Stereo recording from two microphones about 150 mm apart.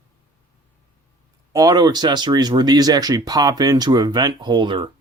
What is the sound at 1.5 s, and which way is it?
Speech, 25° right (ahead or behind).